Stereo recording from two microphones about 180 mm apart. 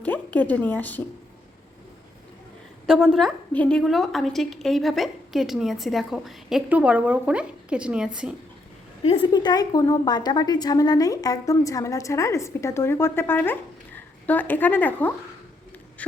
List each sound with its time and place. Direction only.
0.0 s speech: 10° left (ahead or behind)
2.8 s a woman's voice: centre (ahead or behind)
9.0 s a woman's voice: 30° left (ahead or behind); by 15.1 s 10° left (ahead or behind)
16.0 s a sound: 10° left (ahead or behind)